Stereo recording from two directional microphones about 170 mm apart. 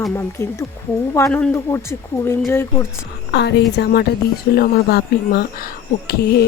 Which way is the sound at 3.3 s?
75° left (ahead or behind).